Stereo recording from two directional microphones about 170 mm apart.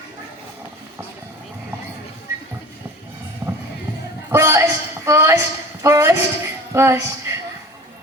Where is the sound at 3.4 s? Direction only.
15° right (ahead or behind).